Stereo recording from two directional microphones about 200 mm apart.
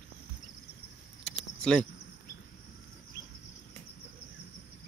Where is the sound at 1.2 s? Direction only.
5° left (ahead or behind).